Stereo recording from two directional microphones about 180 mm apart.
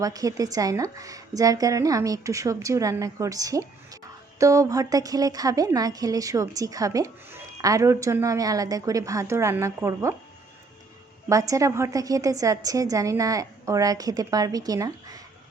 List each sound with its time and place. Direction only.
0.0 s a woman's voice: 20° right (ahead or behind)
11.3 s a woman's voice: 20° right (ahead or behind)